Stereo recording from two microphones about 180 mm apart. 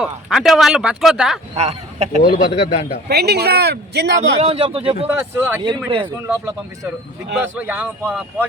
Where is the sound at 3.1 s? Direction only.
65° right (ahead or behind).